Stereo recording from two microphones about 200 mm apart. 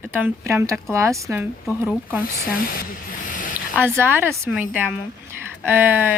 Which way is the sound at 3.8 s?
10° right (ahead or behind).